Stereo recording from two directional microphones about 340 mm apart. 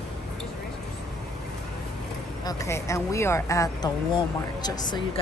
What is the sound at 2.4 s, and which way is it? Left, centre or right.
Speech, centre.